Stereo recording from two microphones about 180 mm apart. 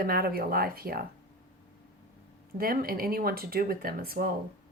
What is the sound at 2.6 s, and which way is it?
Speech, 55° right (ahead or behind).